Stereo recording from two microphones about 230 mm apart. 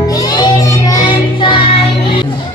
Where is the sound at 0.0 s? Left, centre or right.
Centre.